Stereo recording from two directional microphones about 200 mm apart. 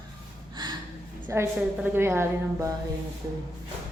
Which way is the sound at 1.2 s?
10° right (ahead or behind).